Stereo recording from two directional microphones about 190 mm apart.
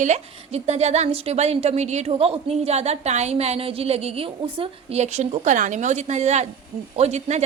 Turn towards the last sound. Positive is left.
turn(degrees=-35)  # may be behind; listen again after turning